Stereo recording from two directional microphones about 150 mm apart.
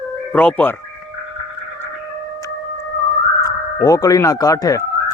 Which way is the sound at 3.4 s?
25° left (ahead or behind).